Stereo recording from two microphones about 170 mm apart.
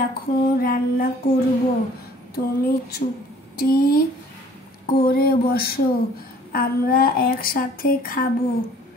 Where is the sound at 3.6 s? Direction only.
60° left (ahead or behind).